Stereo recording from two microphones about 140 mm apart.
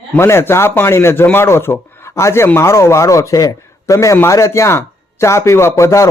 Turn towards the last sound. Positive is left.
turn(degrees=20)  # may be behind; listen again after turning